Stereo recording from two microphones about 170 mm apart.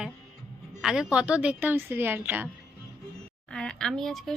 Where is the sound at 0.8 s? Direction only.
5° right (ahead or behind).